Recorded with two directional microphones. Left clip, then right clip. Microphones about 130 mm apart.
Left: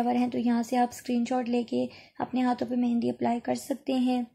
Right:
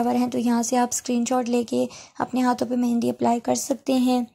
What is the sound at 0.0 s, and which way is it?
Speech, 40° right (ahead or behind).